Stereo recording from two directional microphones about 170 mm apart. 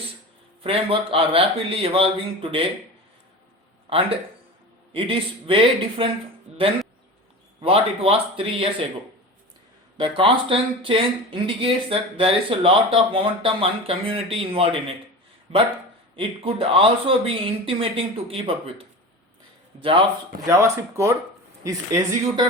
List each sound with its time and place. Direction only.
0.6 s speech: 30° right (ahead or behind)
3.8 s speech: 35° right (ahead or behind)
6.5 s music: 40° right (ahead or behind)
7.6 s speech: 30° right (ahead or behind)
10.0 s speech: 30° right (ahead or behind)
20.4 s speech: 15° right (ahead or behind)